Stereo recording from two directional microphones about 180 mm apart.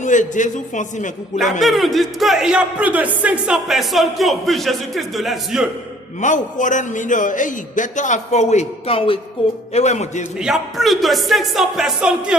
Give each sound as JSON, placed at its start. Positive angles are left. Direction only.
{"t": 0.0, "sound": "a man's voice", "side_deg": 45}
{"t": 1.6, "sound": "speech", "side_deg": 0}
{"t": 6.1, "sound": "a man's voice", "side_deg": 45}
{"t": 10.3, "sound": "speech", "side_deg": -5}